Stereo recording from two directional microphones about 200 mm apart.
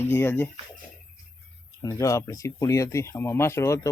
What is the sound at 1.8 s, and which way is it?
Speech, 15° left (ahead or behind).